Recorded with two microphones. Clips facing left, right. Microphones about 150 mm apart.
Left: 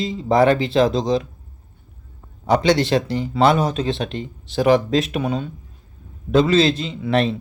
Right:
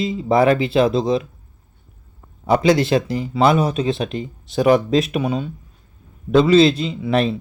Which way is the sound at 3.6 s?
35° left (ahead or behind).